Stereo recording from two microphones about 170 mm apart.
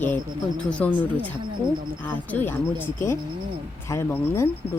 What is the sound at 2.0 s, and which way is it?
Speech, 10° left (ahead or behind).